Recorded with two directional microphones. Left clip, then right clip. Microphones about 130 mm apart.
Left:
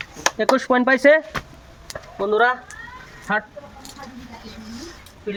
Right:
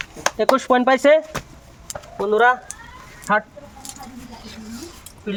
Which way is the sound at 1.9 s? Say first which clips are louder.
Right 1 dB; 75° right (ahead or behind).